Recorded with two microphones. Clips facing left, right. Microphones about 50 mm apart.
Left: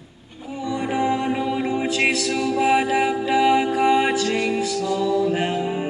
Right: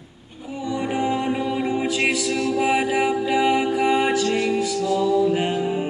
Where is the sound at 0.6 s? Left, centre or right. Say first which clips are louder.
Left 1 dB; centre.